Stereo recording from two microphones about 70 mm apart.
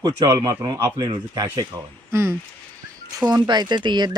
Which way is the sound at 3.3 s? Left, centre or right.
Right.